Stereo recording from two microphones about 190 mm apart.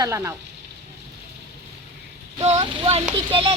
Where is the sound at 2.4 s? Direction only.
35° right (ahead or behind).